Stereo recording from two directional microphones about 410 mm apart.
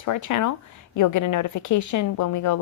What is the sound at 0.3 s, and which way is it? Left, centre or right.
A woman's voice, left.